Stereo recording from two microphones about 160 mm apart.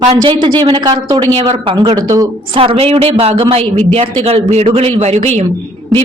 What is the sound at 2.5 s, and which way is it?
A man's voice, 35° right (ahead or behind).